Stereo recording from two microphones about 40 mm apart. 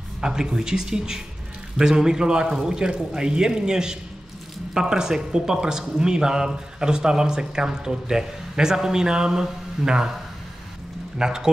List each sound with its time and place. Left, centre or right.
0.2 s a man's voice: centre
11.1 s speech: centre